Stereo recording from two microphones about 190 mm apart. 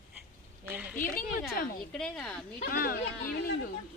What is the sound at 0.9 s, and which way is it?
Speech, 45° left (ahead or behind).